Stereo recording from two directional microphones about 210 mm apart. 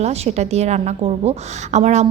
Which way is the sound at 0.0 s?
30° right (ahead or behind).